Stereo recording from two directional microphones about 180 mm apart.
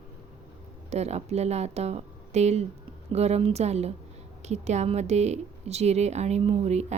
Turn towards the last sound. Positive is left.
turn(degrees=-35)  # may be behind; listen again after turning